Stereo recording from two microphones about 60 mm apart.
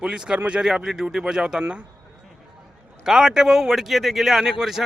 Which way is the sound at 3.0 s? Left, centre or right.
Centre.